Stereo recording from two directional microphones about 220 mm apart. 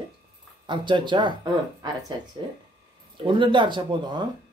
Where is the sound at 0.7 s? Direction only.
20° right (ahead or behind).